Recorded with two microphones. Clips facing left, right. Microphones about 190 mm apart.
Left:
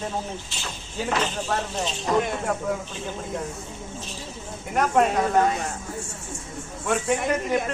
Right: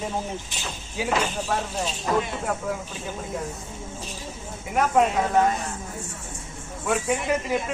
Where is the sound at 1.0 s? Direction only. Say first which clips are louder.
Right 1 dB; 10° right (ahead or behind).